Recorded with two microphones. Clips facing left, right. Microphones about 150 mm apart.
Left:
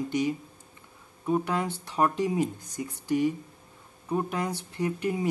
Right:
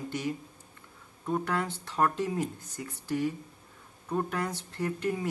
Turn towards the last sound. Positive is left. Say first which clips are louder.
# left 2 dB
turn(degrees=15)  # may be behind; listen again after turning